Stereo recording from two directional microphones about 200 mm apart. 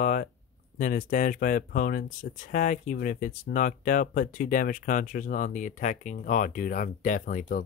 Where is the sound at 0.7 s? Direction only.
40° left (ahead or behind).